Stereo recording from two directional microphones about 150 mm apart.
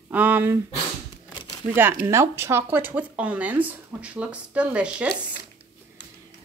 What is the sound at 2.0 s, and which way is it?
Speech, 20° right (ahead or behind).